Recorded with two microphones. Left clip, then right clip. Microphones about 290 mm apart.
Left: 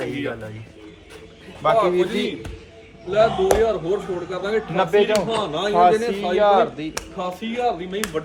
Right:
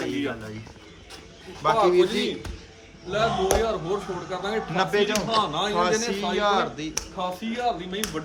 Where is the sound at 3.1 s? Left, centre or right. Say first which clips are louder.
Left 6 dB; centre.